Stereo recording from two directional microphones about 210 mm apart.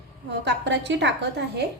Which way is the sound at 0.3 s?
55° right (ahead or behind).